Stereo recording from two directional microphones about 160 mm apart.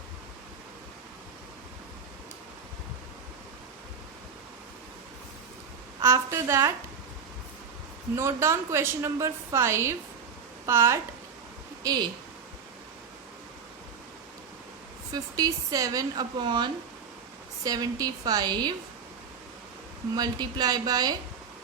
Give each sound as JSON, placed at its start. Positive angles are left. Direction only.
{"t": 6.0, "sound": "a woman's voice", "side_deg": -15}
{"t": 8.1, "sound": "a woman's voice", "side_deg": -15}
{"t": 15.1, "sound": "speech", "side_deg": -20}
{"t": 20.1, "sound": "speech", "side_deg": -25}